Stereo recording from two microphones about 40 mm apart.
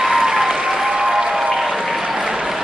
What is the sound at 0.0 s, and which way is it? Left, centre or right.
Applause, centre.